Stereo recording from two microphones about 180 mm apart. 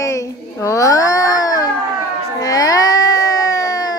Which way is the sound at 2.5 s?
20° left (ahead or behind).